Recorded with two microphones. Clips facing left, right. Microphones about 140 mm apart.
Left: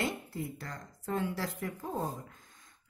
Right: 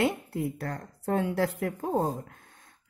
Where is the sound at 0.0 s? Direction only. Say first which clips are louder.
Right 8 dB; 65° right (ahead or behind); by 2.1 s 90° right.